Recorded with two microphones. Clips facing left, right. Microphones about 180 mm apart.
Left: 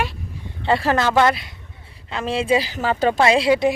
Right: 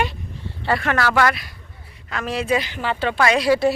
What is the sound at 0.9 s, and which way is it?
Speech, 20° left (ahead or behind).